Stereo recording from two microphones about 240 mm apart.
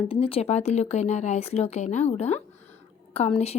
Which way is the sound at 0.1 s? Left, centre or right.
Left.